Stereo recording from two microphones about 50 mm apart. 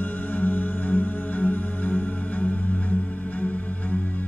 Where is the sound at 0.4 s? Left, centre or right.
Left.